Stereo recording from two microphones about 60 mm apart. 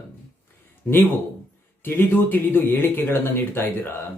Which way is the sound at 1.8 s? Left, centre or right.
Left.